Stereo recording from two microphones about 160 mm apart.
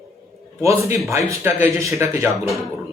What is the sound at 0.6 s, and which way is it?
A man's voice, 20° right (ahead or behind).